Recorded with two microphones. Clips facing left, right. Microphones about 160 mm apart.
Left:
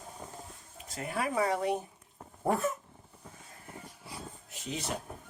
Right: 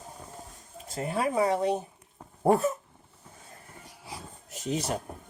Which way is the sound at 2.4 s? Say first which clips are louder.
Right 7 dB; 30° right (ahead or behind).